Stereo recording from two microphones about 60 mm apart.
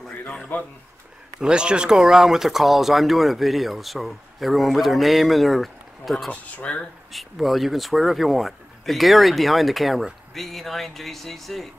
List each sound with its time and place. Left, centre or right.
0.5 s speech: left
1.4 s speech: centre
6.3 s speech: left
7.1 s speech: centre